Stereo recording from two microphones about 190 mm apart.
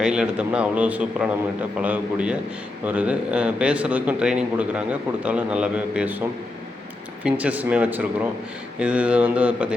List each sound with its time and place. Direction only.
0.0 s a man's voice: 5° right (ahead or behind)
7.3 s a man's voice: 5° right (ahead or behind)